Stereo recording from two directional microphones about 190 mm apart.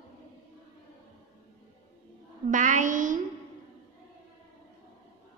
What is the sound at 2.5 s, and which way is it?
Speech, 40° right (ahead or behind).